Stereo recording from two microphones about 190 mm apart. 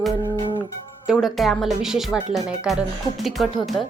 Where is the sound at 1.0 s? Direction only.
Centre (ahead or behind).